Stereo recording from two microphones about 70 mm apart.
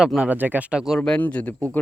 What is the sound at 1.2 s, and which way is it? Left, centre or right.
Speech, left.